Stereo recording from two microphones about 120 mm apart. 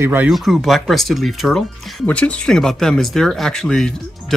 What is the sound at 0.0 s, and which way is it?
Speech, 15° right (ahead or behind).